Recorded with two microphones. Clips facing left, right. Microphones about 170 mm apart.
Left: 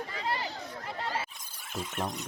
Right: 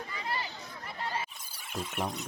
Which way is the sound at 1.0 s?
90° left.